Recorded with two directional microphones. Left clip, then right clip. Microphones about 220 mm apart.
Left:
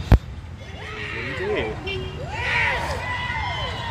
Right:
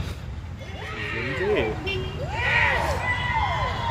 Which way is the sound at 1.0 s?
15° left (ahead or behind).